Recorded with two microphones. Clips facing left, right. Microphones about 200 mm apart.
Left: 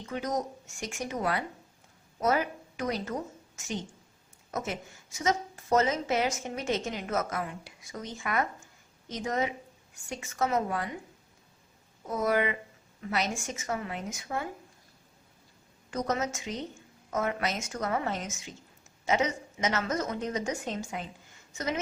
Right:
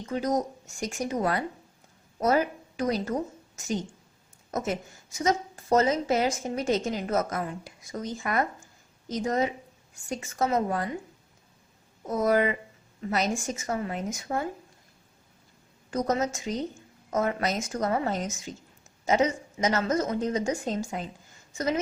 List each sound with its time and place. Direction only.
0.0 s a woman's voice: 35° right (ahead or behind)
12.0 s a woman's voice: 40° right (ahead or behind)
15.9 s a woman's voice: 35° right (ahead or behind)